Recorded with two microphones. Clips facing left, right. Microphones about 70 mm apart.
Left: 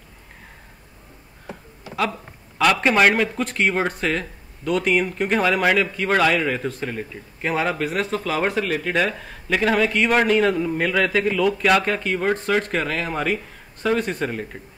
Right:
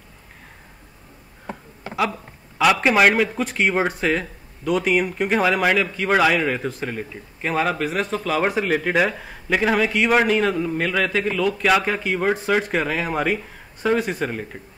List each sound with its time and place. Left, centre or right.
2.6 s speech: centre
8.5 s speech: centre